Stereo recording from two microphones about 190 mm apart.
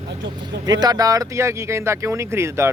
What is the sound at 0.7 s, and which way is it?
Speech, 20° right (ahead or behind).